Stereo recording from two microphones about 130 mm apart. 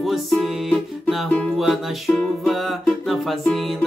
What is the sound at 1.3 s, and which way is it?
Music, 10° left (ahead or behind).